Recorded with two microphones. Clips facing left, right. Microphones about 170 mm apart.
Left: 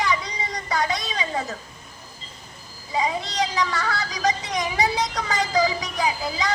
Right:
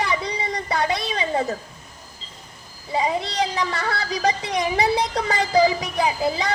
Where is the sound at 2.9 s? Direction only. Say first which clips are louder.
Right 2 dB; 30° right (ahead or behind).